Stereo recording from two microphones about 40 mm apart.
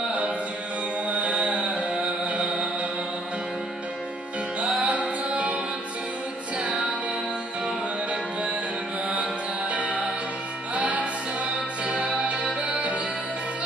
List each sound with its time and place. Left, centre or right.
0.0 s music: right
4.8 s music: right
8.1 s music: right